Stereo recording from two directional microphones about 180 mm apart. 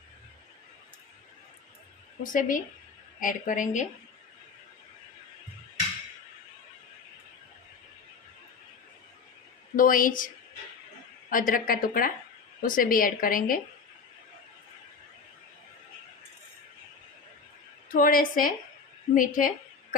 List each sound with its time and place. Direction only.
2.2 s a woman's voice: 45° left (ahead or behind)
9.7 s a woman's voice: 50° left (ahead or behind)
17.8 s a woman's voice: 50° left (ahead or behind)